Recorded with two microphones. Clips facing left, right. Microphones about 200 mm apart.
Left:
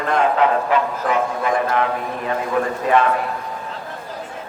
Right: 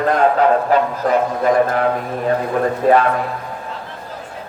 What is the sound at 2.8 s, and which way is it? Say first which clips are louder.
Speech: right 5 dB; 40° right (ahead or behind).